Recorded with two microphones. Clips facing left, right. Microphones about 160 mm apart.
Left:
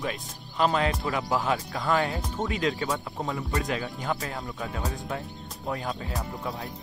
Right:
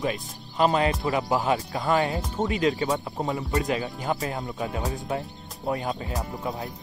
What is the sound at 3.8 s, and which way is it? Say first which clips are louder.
Speech: right 3 dB; 20° right (ahead or behind).